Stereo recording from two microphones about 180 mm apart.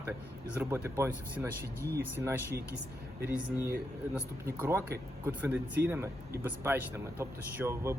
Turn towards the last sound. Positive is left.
turn(degrees=-15)  # may be behind; listen again after turning